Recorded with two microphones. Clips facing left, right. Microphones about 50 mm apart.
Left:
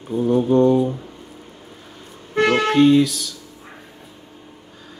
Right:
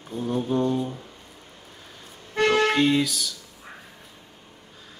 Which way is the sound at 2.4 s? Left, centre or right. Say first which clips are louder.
Left 3 dB; centre.